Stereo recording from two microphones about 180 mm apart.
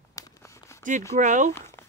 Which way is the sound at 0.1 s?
15° left (ahead or behind).